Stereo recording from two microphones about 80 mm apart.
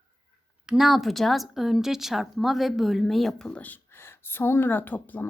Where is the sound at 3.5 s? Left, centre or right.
Centre.